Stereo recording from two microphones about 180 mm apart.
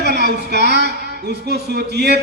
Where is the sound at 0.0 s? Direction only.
65° right (ahead or behind).